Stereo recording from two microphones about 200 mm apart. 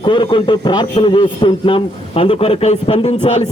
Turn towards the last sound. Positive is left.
turn(degrees=30)  # may be behind; listen again after turning